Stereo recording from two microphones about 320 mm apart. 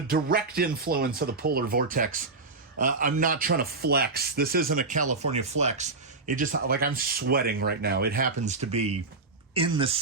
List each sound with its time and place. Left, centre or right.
0.1 s speech: right